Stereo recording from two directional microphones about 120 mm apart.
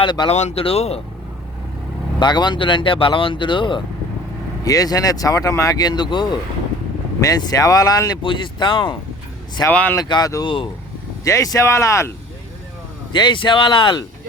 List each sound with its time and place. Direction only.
0.0 s speech: 40° left (ahead or behind)
0.3 s speech: 65° left (ahead or behind)
0.6 s speech: 55° left (ahead or behind)
2.1 s speech: 40° left (ahead or behind)
4.6 s speech: 30° left (ahead or behind)
8.2 s speech: 45° left (ahead or behind)
9.6 s speech: 15° left (ahead or behind)
9.9 s speech: 35° left (ahead or behind)
10.4 s speech: 45° left (ahead or behind)
11.2 s speech: 25° left (ahead or behind)
13.1 s speech: 40° left (ahead or behind)